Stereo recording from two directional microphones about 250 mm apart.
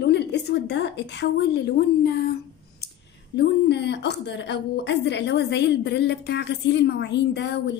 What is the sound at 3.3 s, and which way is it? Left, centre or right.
A woman's voice, left.